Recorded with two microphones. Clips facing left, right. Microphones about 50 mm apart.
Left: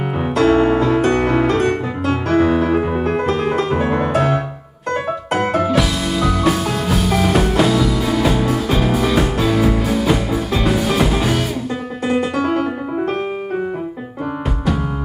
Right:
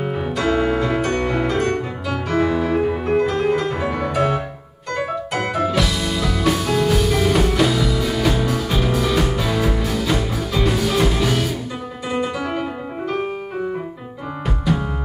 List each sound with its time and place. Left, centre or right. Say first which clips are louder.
0.4 s piano: left 6 dB; left
1.0 s music: left 5 dB; left
1.3 s music: left 4 dB; left
2.7 s piano: left 2 dB; left
3.0 s music: left 1 dB; left
5.5 s music: left 3 dB; left
5.8 s music: left 3 dB; centre
12.1 s music: left 5 dB; left